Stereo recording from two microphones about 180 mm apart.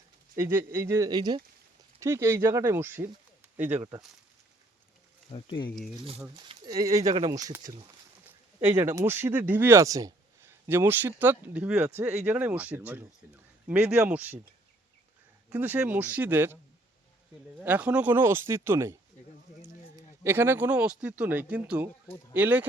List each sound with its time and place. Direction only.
0.3 s speech: 10° right (ahead or behind)
6.3 s speech: 20° right (ahead or behind)
8.6 s speech: 15° right (ahead or behind)
15.4 s speech: 10° right (ahead or behind)
17.6 s speech: 10° right (ahead or behind)
20.2 s speech: 15° right (ahead or behind)